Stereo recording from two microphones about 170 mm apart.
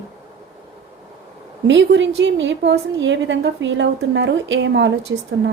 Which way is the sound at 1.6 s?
90° right.